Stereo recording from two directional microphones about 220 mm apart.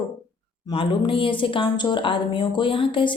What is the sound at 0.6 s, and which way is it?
Speech, 25° left (ahead or behind).